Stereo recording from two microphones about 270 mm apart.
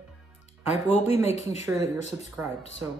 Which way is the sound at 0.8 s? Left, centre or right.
Left.